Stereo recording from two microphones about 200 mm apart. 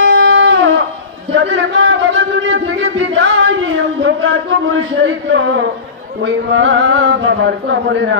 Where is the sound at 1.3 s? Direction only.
65° right (ahead or behind).